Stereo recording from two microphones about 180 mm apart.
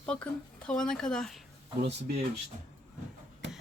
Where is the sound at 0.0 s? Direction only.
5° left (ahead or behind).